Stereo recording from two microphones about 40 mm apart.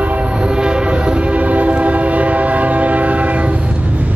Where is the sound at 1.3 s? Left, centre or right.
Right.